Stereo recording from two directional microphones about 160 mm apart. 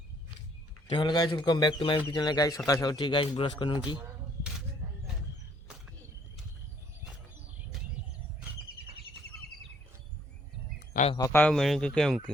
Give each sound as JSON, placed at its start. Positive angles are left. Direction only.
{"t": 0.9, "sound": "a man's voice", "side_deg": 30}
{"t": 10.9, "sound": "a sound", "side_deg": 55}
{"t": 11.3, "sound": "speech", "side_deg": 10}